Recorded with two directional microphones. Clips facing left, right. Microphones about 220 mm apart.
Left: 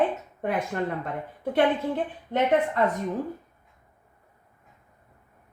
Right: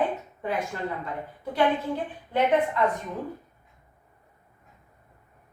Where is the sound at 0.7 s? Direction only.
60° left (ahead or behind).